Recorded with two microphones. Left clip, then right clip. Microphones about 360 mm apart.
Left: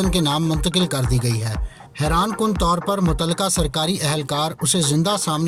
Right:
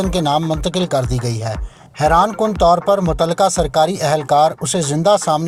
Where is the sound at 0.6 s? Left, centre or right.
Centre.